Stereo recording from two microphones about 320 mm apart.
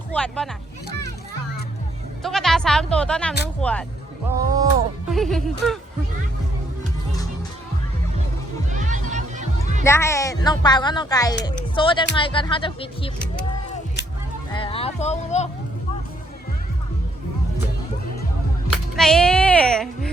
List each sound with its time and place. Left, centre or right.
0.1 s speech: centre
2.2 s speech: centre
4.5 s speech: centre
5.1 s speech: centre
8.7 s music: right
9.8 s speech: centre
14.5 s speech: centre
18.9 s speech: centre